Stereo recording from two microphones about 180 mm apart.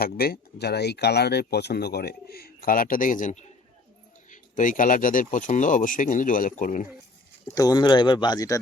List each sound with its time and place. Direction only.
0.0 s speech: 60° left (ahead or behind)
7.5 s speech: 20° left (ahead or behind)